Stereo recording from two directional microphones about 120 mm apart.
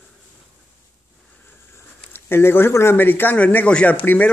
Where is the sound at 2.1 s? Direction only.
20° left (ahead or behind).